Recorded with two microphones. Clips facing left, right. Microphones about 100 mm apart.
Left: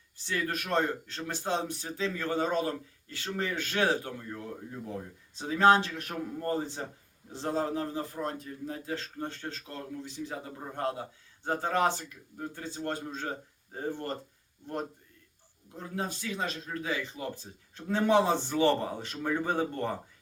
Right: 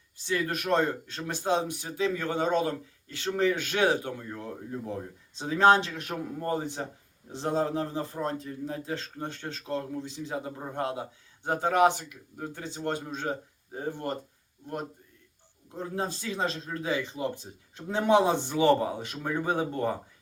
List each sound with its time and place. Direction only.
0.3 s a man's voice: 20° right (ahead or behind)
15.8 s speech: 30° right (ahead or behind); by 19.9 s 15° right (ahead or behind)